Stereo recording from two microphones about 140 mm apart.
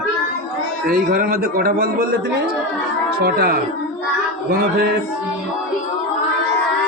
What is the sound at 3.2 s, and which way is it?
Speech, 90° right.